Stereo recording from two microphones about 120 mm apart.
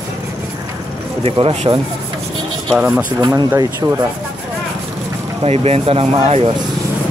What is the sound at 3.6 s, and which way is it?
Speech, 25° right (ahead or behind).